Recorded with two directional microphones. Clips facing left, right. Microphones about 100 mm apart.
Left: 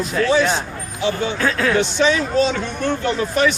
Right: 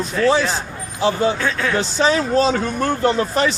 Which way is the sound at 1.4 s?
Centre (ahead or behind).